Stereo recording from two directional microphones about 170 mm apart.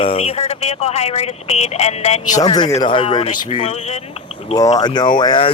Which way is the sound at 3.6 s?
40° left (ahead or behind).